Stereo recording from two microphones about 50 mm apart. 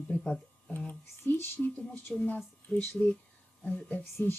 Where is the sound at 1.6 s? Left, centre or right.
Left.